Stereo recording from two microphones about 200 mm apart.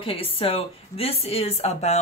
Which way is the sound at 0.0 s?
25° left (ahead or behind).